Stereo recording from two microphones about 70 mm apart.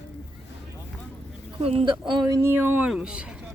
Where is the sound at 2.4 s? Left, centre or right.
Right.